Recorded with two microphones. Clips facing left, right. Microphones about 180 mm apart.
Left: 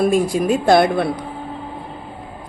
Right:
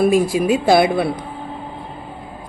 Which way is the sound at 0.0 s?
5° right (ahead or behind).